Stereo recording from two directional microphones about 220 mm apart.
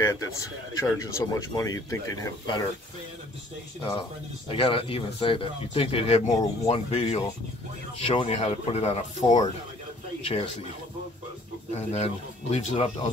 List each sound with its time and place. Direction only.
0.0 s speech: 15° left (ahead or behind)
4.5 s speech: 25° left (ahead or behind)
11.7 s speech: 30° left (ahead or behind)